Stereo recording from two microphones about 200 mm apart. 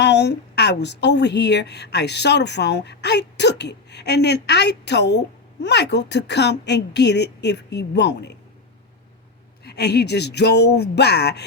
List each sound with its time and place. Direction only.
0.0 s a woman's voice: 60° left (ahead or behind)
9.6 s a woman's voice: 55° left (ahead or behind)